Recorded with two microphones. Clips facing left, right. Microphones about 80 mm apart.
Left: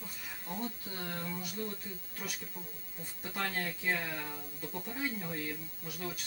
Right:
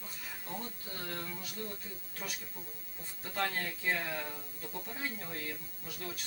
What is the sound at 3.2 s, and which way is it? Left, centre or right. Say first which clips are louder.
Speech: right 1 dB; centre.